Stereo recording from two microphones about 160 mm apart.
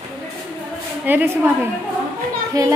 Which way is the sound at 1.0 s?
10° right (ahead or behind).